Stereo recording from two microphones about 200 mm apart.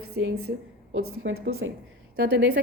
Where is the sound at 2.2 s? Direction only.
50° right (ahead or behind).